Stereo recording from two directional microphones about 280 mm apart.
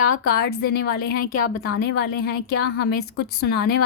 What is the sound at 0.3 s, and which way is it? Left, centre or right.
A woman's voice, left.